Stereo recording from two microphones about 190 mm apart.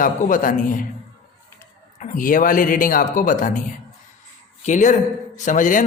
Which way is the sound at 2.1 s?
45° left (ahead or behind).